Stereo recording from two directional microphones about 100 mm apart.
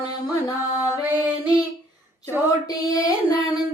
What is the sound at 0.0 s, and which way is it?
Music, 40° left (ahead or behind).